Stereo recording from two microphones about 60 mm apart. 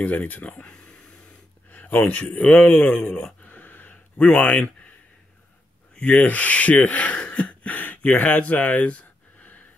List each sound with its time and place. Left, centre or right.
0.0 s speech: left
3.4 s a sound: left
5.9 s speech: left